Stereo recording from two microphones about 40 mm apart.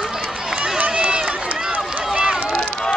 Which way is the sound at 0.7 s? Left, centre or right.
Right.